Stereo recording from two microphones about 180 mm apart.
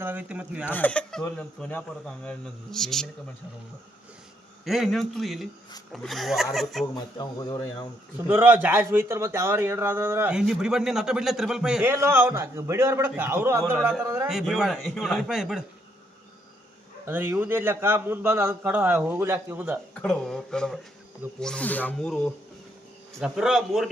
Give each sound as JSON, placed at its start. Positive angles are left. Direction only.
{"t": 0.0, "sound": "speech", "side_deg": -10}
{"t": 0.7, "sound": "speech", "side_deg": 10}
{"t": 4.6, "sound": "speech", "side_deg": 0}
{"t": 6.9, "sound": "speech", "side_deg": 20}
{"t": 8.3, "sound": "speech", "side_deg": -10}
{"t": 14.3, "sound": "speech", "side_deg": 0}
{"t": 17.1, "sound": "speech", "side_deg": -10}
{"t": 19.9, "sound": "speech", "side_deg": 5}